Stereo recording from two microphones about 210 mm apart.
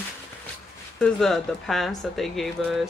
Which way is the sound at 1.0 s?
5° left (ahead or behind).